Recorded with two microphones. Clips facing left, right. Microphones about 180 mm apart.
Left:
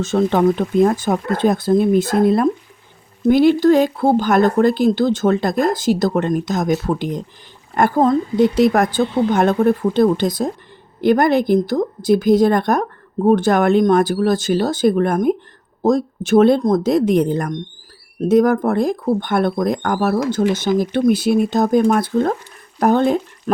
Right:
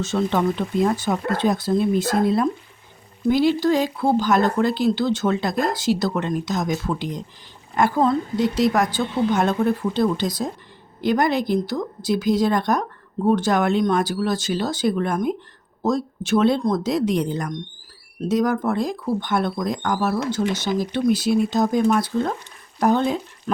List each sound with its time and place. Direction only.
0.0 s speech: 50° left (ahead or behind)